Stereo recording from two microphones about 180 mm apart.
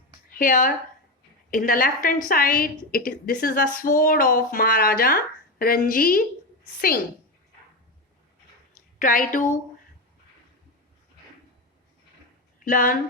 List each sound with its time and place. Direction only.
0.3 s a woman's voice: 50° left (ahead or behind)
8.7 s a woman's voice: 50° left (ahead or behind)
12.6 s a woman's voice: 50° left (ahead or behind)